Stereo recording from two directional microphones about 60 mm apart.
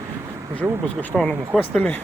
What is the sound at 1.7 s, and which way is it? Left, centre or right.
Speech, centre.